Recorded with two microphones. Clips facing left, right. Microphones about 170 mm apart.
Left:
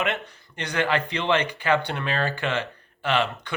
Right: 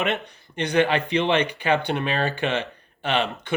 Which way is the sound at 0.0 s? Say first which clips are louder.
Right 2 dB; 20° right (ahead or behind).